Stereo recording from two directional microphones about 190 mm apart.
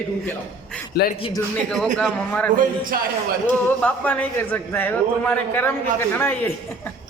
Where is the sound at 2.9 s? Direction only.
55° right (ahead or behind).